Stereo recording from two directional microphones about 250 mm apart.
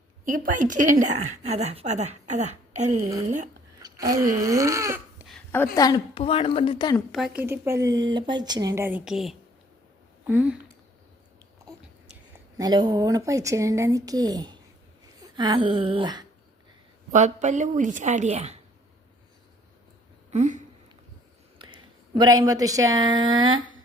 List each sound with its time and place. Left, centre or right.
0.3 s a woman's voice: right
3.9 s speech: centre
5.7 s a woman's voice: centre
7.1 s speech: centre
12.5 s speech: centre
15.2 s a sound: centre
17.1 s a woman's voice: right
20.3 s a sound: right
21.6 s speech: centre